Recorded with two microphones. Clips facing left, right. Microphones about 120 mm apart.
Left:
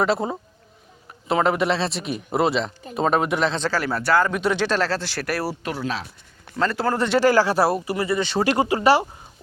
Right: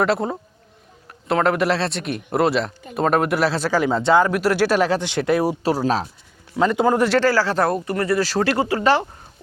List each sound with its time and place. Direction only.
0.0 s speech: centre (ahead or behind)
3.7 s speech: 15° right (ahead or behind)
4.3 s speech: 5° right (ahead or behind)
5.6 s speech: 40° right (ahead or behind)
6.6 s speech: 15° right (ahead or behind)
7.2 s speech: 15° left (ahead or behind); by 8.4 s centre (ahead or behind)
8.4 s speech: 15° left (ahead or behind)